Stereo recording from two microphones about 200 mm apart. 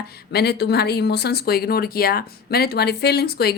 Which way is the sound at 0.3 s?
55° left (ahead or behind).